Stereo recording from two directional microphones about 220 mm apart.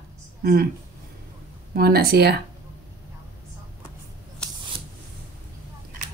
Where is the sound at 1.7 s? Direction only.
45° right (ahead or behind).